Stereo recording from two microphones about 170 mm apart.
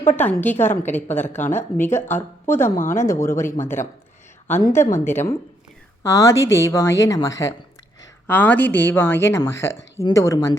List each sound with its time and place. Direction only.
0.1 s a woman's voice: 10° left (ahead or behind)